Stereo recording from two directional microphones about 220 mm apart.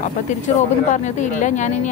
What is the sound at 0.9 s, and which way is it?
A woman's voice, 35° left (ahead or behind).